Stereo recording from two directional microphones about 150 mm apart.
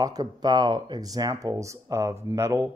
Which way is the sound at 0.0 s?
25° right (ahead or behind).